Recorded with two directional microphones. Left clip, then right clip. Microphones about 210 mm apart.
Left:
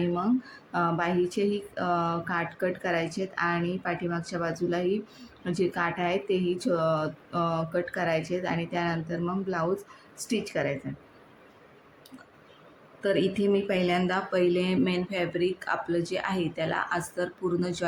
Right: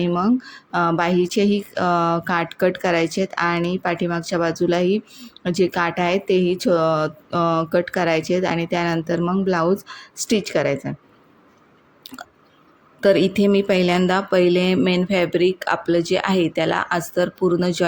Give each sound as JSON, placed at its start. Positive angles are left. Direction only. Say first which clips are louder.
{"t": 0.0, "sound": "a woman's voice", "louder": "right 8 dB", "side_deg": -40}
{"t": 13.0, "sound": "speech", "louder": "right 10 dB", "side_deg": -45}